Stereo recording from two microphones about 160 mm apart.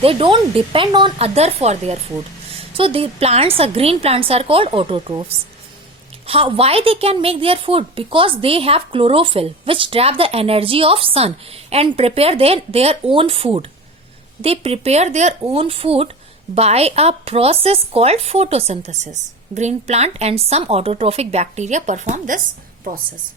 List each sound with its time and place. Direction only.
0.0 s a woman's voice: 35° right (ahead or behind)
6.2 s a woman's voice: 35° right (ahead or behind)